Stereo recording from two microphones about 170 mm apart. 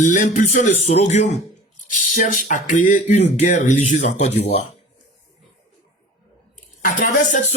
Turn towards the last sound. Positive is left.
turn(degrees=50)  # may be behind; listen again after turning